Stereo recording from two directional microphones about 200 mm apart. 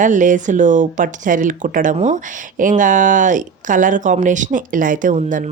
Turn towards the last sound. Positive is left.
turn(degrees=-40)  # may be behind; listen again after turning